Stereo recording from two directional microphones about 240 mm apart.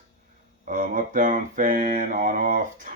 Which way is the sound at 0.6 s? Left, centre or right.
Right.